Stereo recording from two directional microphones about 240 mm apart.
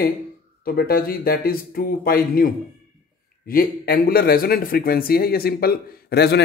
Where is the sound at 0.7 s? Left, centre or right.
Left.